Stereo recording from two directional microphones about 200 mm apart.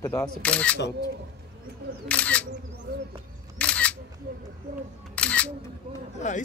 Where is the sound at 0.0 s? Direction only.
10° left (ahead or behind).